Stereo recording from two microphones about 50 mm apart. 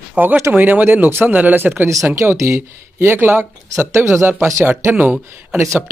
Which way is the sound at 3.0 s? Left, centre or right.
Right.